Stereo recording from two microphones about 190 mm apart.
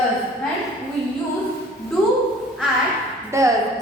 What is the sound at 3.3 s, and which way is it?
Speech, 15° right (ahead or behind).